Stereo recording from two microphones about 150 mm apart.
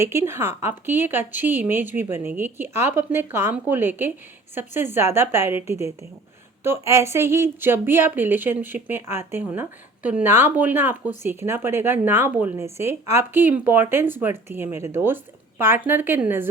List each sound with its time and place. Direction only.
0.0 s speech: 15° right (ahead or behind)